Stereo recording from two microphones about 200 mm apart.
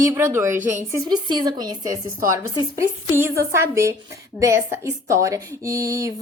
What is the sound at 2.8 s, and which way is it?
A woman's voice, 10° right (ahead or behind).